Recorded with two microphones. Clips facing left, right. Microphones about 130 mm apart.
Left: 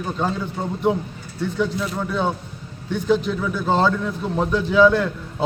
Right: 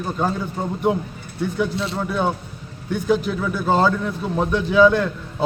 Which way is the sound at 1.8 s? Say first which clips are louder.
Right 1 dB; 30° right (ahead or behind).